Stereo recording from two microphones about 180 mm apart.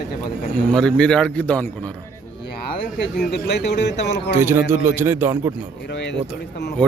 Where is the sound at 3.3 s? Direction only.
65° left (ahead or behind).